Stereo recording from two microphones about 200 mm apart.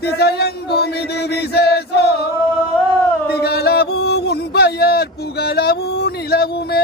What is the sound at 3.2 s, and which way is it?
Music, 50° left (ahead or behind).